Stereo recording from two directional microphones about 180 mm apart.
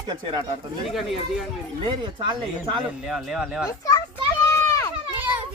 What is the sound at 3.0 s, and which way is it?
Speech, 5° right (ahead or behind).